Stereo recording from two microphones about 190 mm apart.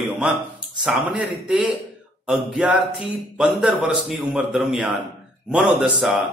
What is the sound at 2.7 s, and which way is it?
Speech, 5° right (ahead or behind).